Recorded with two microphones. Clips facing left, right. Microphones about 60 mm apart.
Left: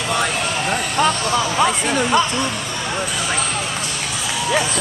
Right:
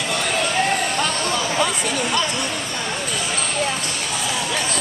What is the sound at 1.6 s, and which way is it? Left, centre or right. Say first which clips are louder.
Speech: left 4 dB; left.